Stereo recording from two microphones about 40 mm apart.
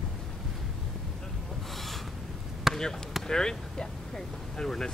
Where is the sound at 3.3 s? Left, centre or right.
Centre.